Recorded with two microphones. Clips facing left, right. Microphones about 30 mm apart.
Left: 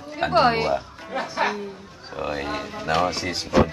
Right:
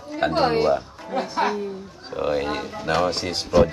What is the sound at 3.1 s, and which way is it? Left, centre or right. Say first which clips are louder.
Speech: right 1 dB; right.